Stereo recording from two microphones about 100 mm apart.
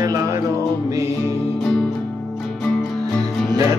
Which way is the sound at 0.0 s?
35° right (ahead or behind).